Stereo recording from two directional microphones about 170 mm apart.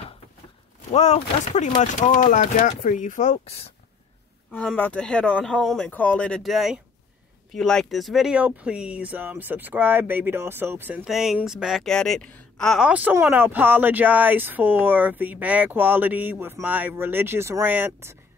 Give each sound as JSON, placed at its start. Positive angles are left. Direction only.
{"t": 0.9, "sound": "speech", "side_deg": 40}
{"t": 4.5, "sound": "speech", "side_deg": 5}